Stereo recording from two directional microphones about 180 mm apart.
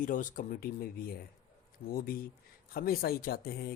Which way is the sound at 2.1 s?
55° left (ahead or behind).